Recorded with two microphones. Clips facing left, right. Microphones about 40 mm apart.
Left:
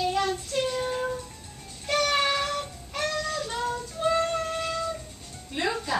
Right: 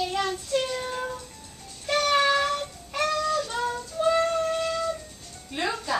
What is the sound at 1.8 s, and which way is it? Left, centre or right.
Music, centre.